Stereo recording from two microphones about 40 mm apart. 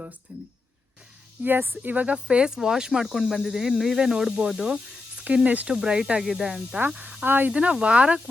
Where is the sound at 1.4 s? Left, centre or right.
Right.